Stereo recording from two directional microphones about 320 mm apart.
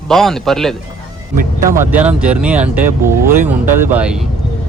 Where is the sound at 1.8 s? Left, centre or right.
Centre.